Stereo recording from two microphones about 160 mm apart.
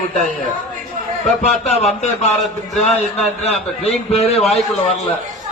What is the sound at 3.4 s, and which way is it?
A man's voice, 40° left (ahead or behind).